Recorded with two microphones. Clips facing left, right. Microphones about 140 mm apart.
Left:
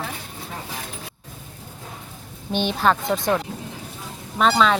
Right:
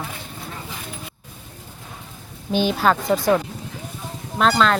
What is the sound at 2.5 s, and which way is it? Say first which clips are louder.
Speech: right 2 dB; 5° right (ahead or behind).